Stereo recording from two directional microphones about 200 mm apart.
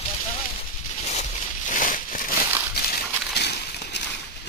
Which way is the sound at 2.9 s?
55° left (ahead or behind).